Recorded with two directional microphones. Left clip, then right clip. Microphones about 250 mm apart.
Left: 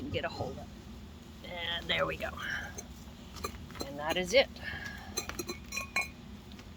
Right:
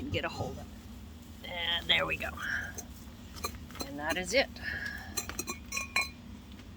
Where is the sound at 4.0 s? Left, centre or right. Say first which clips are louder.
Left 2 dB; centre.